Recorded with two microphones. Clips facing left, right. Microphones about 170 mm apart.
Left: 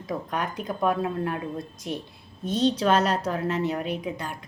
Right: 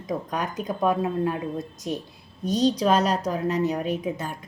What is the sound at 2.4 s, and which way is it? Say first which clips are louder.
Speech: right 1 dB; 40° right (ahead or behind).